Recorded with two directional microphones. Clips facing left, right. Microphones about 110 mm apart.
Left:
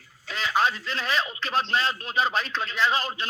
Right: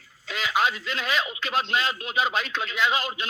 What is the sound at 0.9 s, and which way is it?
Speech, 35° left (ahead or behind).